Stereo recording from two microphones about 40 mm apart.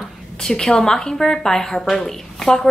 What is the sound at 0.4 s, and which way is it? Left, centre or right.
A woman's voice, centre.